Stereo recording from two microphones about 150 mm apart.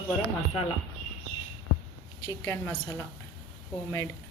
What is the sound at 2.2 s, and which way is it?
Speech, 20° left (ahead or behind).